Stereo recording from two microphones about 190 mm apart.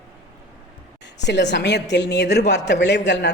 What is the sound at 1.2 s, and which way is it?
Speech, 65° left (ahead or behind).